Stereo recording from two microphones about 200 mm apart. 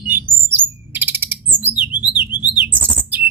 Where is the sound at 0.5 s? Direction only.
10° right (ahead or behind).